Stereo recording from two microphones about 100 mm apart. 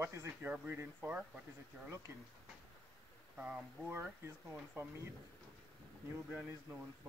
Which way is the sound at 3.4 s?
15° right (ahead or behind).